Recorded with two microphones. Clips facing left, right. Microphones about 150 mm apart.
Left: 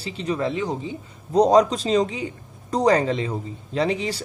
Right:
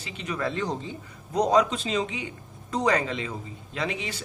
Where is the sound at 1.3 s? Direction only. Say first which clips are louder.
Left 6 dB; 35° left (ahead or behind).